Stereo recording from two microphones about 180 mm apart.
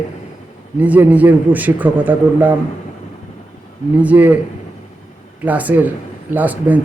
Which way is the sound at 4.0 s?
10° right (ahead or behind).